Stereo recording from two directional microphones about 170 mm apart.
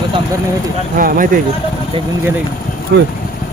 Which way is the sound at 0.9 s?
55° right (ahead or behind).